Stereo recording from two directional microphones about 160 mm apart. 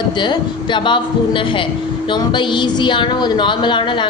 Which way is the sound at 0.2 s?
30° left (ahead or behind).